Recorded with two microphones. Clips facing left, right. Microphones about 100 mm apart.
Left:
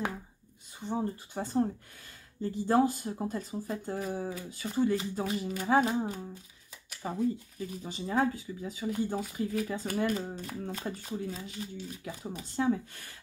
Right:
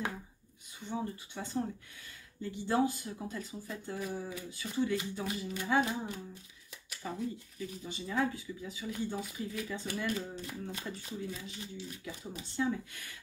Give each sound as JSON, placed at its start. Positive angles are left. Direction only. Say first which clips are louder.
{"t": 0.7, "sound": "speech", "louder": "left 5 dB", "side_deg": 40}
{"t": 7.0, "sound": "speech", "louder": "left 7 dB", "side_deg": 35}